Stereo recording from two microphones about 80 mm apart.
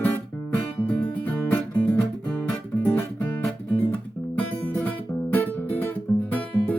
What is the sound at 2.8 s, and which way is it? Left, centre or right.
Music, left.